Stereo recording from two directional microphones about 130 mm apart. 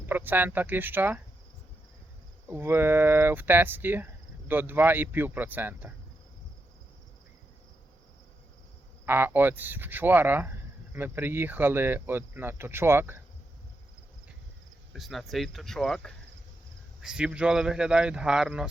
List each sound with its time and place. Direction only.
0.0 s speech: 15° right (ahead or behind)
2.5 s speech: 15° right (ahead or behind)
9.0 s speech: 15° right (ahead or behind)
14.9 s speech: centre (ahead or behind)